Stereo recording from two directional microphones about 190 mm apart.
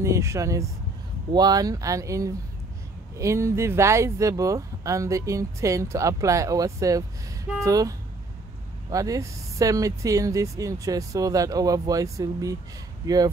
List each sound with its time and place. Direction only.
0.0 s speech: 15° right (ahead or behind)
8.9 s speech: 20° right (ahead or behind)